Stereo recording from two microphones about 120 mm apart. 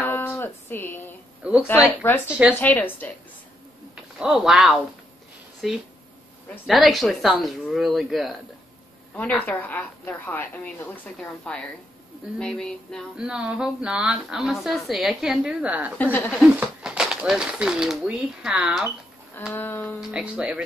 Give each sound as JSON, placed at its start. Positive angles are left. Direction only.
{"t": 0.0, "sound": "a sound", "side_deg": 20}
{"t": 1.4, "sound": "speech", "side_deg": -10}
{"t": 2.0, "sound": "a woman's voice", "side_deg": 15}
{"t": 4.2, "sound": "speech", "side_deg": -5}
{"t": 9.1, "sound": "a woman's voice", "side_deg": 15}
{"t": 13.1, "sound": "a woman's voice", "side_deg": -5}
{"t": 16.0, "sound": "a woman's voice", "side_deg": 15}
{"t": 16.5, "sound": "speech", "side_deg": -5}
{"t": 19.5, "sound": "a woman's voice", "side_deg": 15}
{"t": 20.0, "sound": "a woman's voice", "side_deg": -10}